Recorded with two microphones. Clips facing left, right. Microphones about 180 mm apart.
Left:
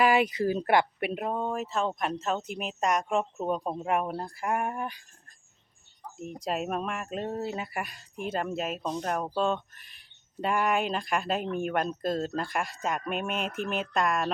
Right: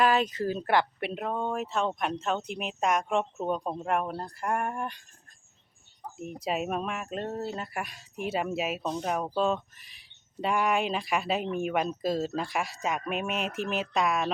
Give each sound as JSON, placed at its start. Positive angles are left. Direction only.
{"t": 0.0, "sound": "speech", "side_deg": 10}
{"t": 6.1, "sound": "speech", "side_deg": -5}